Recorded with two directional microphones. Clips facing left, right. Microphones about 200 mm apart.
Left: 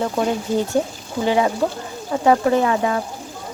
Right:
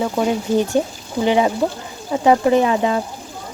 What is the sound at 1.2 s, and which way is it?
Speech, 20° right (ahead or behind).